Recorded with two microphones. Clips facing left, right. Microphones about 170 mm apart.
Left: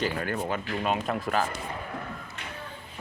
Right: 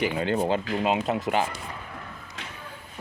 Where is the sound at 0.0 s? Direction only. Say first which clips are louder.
Right 4 dB; 20° right (ahead or behind).